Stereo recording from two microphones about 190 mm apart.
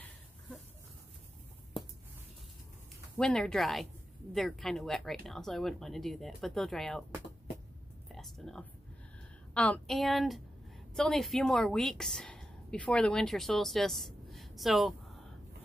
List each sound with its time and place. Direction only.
3.2 s speech: 5° left (ahead or behind)
8.1 s a sound: centre (ahead or behind)
9.5 s a woman's voice: 5° left (ahead or behind)